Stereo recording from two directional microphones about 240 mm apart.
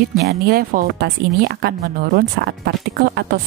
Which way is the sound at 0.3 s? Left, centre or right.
Right.